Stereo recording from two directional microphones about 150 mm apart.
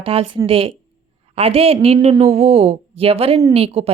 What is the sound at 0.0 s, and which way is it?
Speech, 40° right (ahead or behind).